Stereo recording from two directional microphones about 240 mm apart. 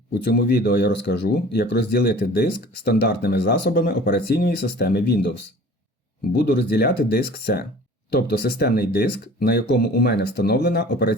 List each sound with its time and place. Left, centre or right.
0.1 s speech: left
6.3 s speech: left